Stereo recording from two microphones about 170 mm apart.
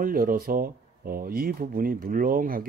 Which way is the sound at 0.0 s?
55° right (ahead or behind).